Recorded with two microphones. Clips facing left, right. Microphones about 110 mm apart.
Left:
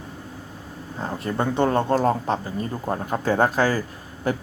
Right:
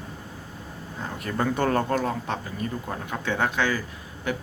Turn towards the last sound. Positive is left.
turn(degrees=35)  # may be behind; listen again after turning